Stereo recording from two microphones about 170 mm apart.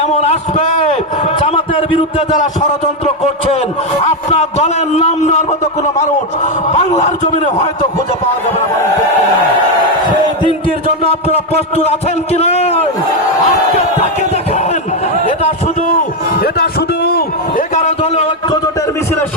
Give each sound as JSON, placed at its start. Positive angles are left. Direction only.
{"t": 0.0, "sound": "a sound", "side_deg": 40}
{"t": 1.4, "sound": "a man's voice", "side_deg": 30}
{"t": 4.0, "sound": "a man's voice", "side_deg": 40}
{"t": 11.3, "sound": "a man's voice", "side_deg": 40}
{"t": 16.4, "sound": "music", "side_deg": 70}
{"t": 17.7, "sound": "a sound", "side_deg": 40}